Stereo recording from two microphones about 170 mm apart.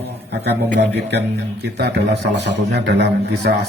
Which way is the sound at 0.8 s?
80° right.